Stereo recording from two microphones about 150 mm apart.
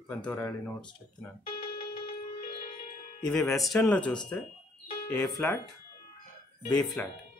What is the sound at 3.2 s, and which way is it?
Speech, 5° left (ahead or behind).